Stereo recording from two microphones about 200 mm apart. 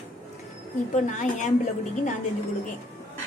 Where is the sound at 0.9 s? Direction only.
40° left (ahead or behind).